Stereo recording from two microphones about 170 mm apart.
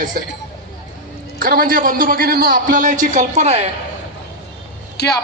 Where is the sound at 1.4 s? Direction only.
60° right (ahead or behind); by 3.7 s 40° right (ahead or behind).